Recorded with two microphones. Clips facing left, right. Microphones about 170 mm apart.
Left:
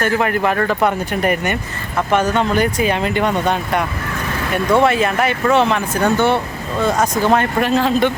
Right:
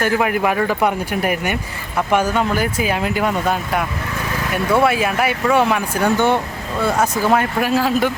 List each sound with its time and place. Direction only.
0.0 s speech: 10° right (ahead or behind)